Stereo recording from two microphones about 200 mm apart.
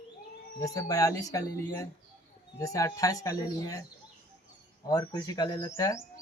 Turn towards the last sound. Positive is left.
turn(degrees=15)  # may be behind; listen again after turning